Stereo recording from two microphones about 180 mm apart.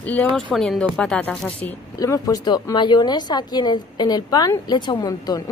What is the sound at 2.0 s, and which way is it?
Speech, 20° left (ahead or behind).